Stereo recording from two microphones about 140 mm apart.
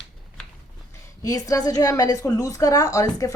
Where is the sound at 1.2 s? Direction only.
25° left (ahead or behind).